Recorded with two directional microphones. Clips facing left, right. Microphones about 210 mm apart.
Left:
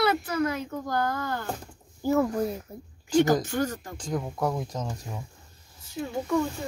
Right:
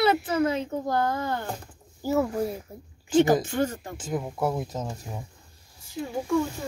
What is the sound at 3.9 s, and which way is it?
Speech, 5° right (ahead or behind).